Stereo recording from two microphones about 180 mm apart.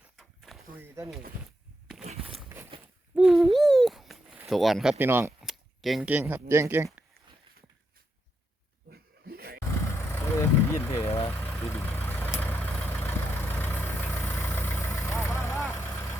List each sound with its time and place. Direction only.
0.2 s a sound: centre (ahead or behind)
0.8 s speech: 15° right (ahead or behind)
2.5 s a sound: 15° right (ahead or behind)
3.2 s owl: centre (ahead or behind)
4.4 s speech: centre (ahead or behind)
5.4 s a sound: centre (ahead or behind)
6.5 s speech: 15° right (ahead or behind)
8.9 s goat: 60° right (ahead or behind)
10.1 s vehicle: 15° left (ahead or behind)
10.9 s vehicle: 35° left (ahead or behind)
11.3 s vehicle: 10° left (ahead or behind)